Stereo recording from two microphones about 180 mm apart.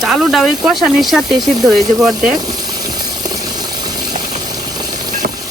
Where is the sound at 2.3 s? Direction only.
20° right (ahead or behind).